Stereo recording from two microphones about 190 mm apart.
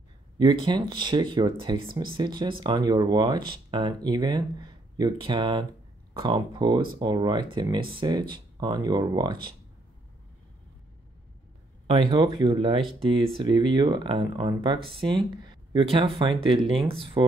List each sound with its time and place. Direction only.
0.4 s speech: 25° right (ahead or behind)
11.9 s speech: 25° right (ahead or behind)